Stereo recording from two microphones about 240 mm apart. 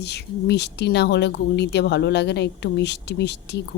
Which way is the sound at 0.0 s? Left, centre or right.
Left.